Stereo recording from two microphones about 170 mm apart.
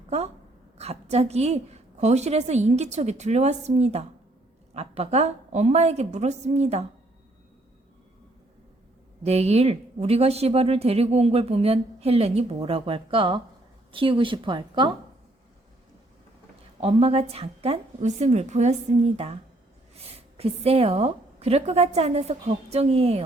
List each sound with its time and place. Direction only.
0.8 s speech: 40° right (ahead or behind)
9.2 s speech: 40° right (ahead or behind)
16.8 s speech: 35° right (ahead or behind)